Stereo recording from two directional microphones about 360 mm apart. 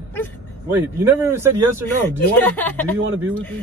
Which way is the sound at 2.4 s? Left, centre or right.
Centre.